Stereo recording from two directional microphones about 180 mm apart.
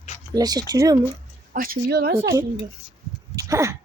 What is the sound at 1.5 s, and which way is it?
Speech, 50° right (ahead or behind).